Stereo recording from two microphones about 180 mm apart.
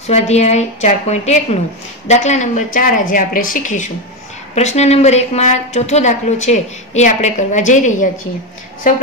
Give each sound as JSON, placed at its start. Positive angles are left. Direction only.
{"t": 0.0, "sound": "a woman's voice", "side_deg": 40}